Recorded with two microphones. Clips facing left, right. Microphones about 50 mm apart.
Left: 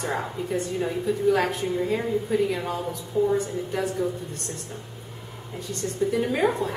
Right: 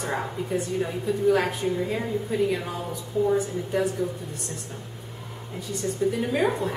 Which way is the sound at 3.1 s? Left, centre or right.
Left.